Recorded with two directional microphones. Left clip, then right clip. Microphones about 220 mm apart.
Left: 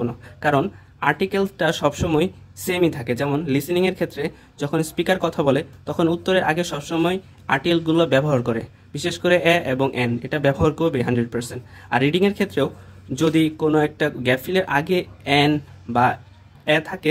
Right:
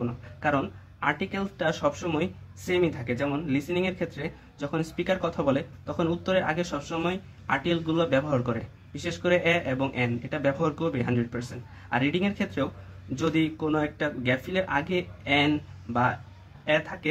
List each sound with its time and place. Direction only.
0.4 s speech: 35° left (ahead or behind)
16.6 s speech: 35° left (ahead or behind)